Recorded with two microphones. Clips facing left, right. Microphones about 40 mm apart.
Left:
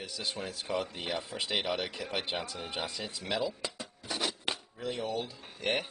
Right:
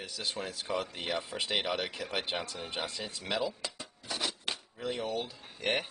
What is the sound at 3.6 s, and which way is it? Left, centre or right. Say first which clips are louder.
Rub: left 2 dB; centre.